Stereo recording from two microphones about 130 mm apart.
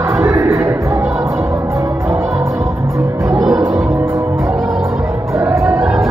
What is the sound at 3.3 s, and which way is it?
Music, centre (ahead or behind).